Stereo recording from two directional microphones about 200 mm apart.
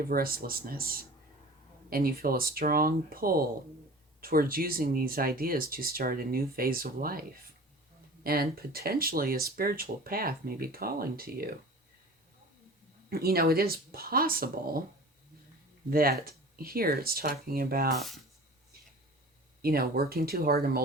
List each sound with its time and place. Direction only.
0.0 s speech: 45° right (ahead or behind)
13.1 s speech: 50° right (ahead or behind)
15.9 s speech: 45° right (ahead or behind)
17.9 s speech: centre (ahead or behind)
19.6 s speech: 50° right (ahead or behind)